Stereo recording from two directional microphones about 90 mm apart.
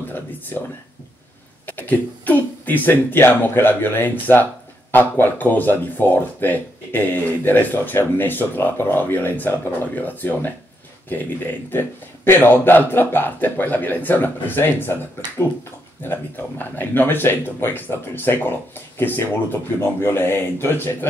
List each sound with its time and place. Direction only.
1.7 s speech: 20° left (ahead or behind)
12.3 s speech: 25° left (ahead or behind)